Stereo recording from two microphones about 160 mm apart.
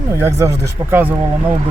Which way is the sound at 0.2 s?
15° right (ahead or behind).